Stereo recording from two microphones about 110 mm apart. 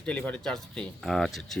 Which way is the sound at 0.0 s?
10° left (ahead or behind).